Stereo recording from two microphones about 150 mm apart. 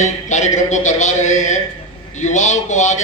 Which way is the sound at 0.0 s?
50° left (ahead or behind).